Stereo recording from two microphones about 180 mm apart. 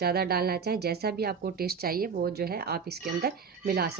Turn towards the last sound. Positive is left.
turn(degrees=-60)  # may be behind; listen again after turning